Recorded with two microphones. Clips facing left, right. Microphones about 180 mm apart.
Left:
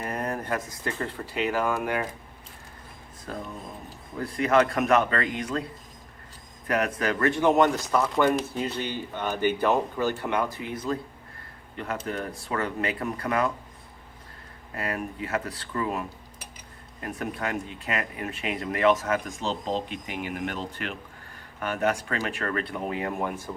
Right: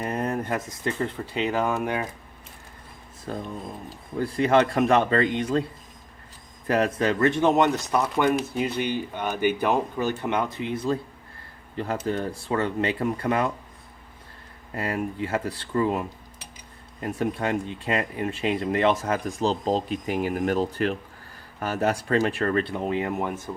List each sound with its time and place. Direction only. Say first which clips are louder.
0.0 s speech: right 3 dB; 25° right (ahead or behind)
3.3 s speech: right 4 dB; 30° right (ahead or behind)
6.7 s speech: right 3 dB; 30° right (ahead or behind)
12.0 s speech: right 5 dB; 30° right (ahead or behind)
14.8 s speech: right 4 dB; 30° right (ahead or behind)